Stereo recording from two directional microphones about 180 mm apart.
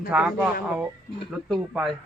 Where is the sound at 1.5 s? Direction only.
5° right (ahead or behind).